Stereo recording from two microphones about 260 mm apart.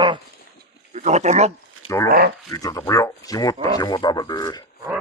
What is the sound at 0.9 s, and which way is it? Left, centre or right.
Speech, right.